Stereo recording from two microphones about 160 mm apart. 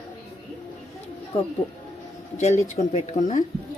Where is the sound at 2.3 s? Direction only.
50° left (ahead or behind).